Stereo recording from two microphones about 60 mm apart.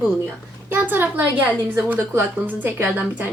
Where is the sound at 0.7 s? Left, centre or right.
Right.